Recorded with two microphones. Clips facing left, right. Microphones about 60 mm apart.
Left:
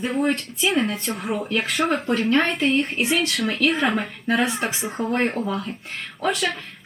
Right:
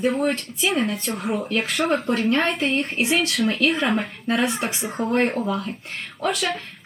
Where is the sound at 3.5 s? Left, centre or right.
Left.